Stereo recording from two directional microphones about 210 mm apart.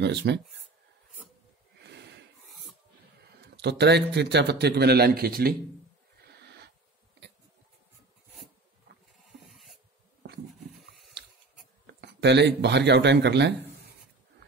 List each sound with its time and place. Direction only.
0.0 s a man's voice: 55° right (ahead or behind)
1.8 s snort: 55° right (ahead or behind)
3.3 s a man's voice: 55° right (ahead or behind)
6.2 s a sound: 50° right (ahead or behind)
11.8 s speech: 55° right (ahead or behind)